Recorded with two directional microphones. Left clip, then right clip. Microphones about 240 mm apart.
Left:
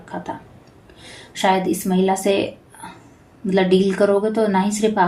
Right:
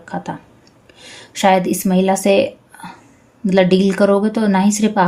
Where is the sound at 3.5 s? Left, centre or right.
Right.